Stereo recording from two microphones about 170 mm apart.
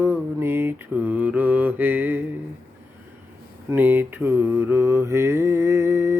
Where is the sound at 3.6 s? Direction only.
10° right (ahead or behind).